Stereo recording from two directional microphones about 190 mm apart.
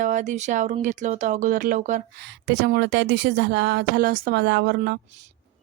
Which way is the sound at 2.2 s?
65° right (ahead or behind).